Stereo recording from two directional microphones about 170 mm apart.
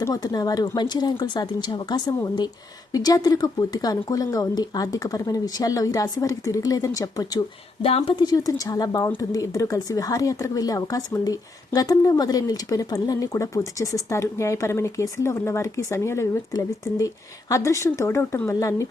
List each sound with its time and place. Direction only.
0.0 s a woman's voice: 20° left (ahead or behind)
7.8 s a woman's voice: 35° left (ahead or behind); by 18.9 s 15° left (ahead or behind)